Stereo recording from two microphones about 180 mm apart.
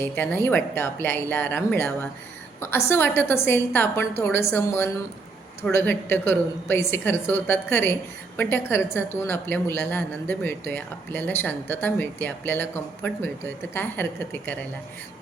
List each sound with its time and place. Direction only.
0.0 s speech: 10° left (ahead or behind)